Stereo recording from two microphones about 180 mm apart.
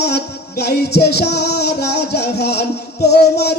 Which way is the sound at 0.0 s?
65° left (ahead or behind).